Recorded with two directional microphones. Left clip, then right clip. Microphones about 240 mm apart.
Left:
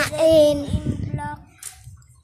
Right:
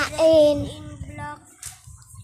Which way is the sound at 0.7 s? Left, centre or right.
Left.